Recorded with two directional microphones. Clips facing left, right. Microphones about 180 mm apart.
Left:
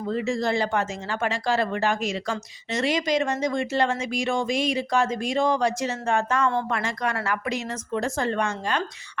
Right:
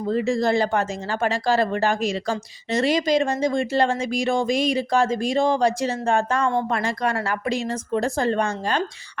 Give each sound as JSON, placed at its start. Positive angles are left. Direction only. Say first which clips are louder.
{"t": 0.1, "sound": "speech", "louder": "right 4 dB", "side_deg": -35}